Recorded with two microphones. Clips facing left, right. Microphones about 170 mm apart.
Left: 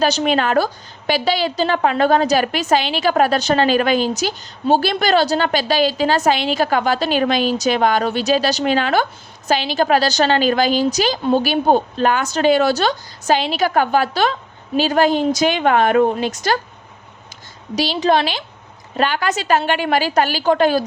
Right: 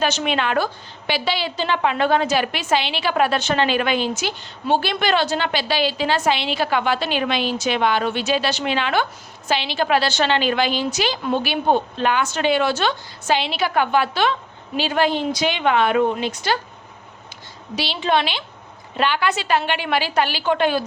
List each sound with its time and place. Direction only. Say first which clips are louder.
0.0 s a woman's voice: left 4 dB; 40° left (ahead or behind)
17.7 s a woman's voice: left 4 dB; 40° left (ahead or behind)